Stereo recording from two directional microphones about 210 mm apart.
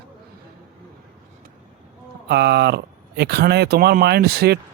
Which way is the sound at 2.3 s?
50° right (ahead or behind).